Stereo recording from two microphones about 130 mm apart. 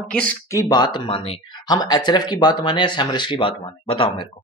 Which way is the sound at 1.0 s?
45° left (ahead or behind).